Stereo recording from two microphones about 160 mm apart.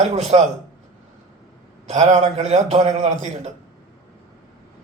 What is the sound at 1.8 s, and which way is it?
A man's voice, 50° right (ahead or behind).